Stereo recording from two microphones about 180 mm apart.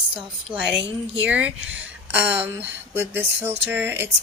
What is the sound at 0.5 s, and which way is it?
A woman's voice, 5° right (ahead or behind).